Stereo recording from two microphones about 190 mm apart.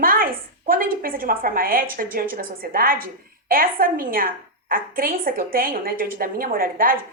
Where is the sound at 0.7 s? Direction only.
50° right (ahead or behind).